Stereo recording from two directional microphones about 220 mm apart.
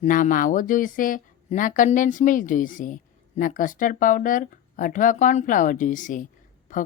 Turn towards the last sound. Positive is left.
turn(degrees=35)  # may be behind; listen again after turning